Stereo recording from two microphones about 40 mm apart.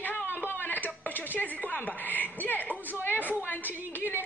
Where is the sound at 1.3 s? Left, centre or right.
Left.